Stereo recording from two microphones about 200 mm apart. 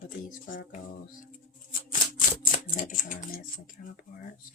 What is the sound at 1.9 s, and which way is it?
Typewriter, 40° left (ahead or behind).